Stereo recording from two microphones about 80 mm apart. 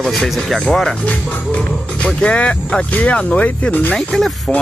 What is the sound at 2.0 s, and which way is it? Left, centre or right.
Speech, centre.